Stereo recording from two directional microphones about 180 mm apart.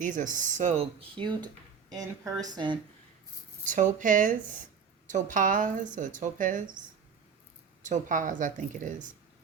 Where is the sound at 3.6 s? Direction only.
45° right (ahead or behind).